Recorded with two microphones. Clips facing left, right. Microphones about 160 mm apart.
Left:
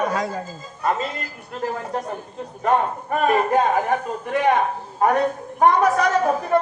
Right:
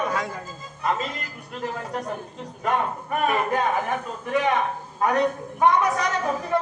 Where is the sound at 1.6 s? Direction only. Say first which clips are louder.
Left 4 dB; 45° left (ahead or behind).